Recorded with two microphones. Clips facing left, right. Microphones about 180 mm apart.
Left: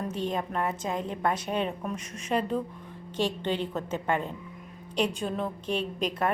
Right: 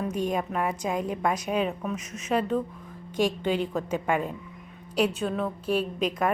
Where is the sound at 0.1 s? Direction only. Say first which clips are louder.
Right 3 dB; 15° right (ahead or behind).